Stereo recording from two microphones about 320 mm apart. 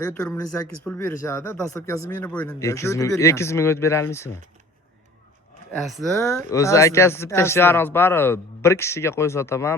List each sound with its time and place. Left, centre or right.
0.0 s speech: centre
5.8 s speech: centre